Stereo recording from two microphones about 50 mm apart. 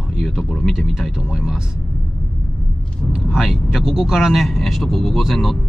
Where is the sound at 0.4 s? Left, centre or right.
Centre.